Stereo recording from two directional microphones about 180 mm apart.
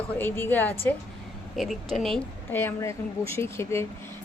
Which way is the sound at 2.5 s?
15° left (ahead or behind).